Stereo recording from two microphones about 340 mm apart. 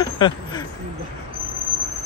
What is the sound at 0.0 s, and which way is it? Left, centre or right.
Speech, centre.